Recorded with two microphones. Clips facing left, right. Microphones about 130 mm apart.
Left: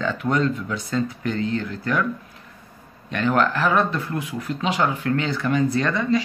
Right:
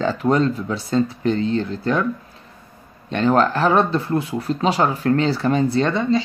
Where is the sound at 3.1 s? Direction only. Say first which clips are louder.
Right 4 dB; 30° right (ahead or behind).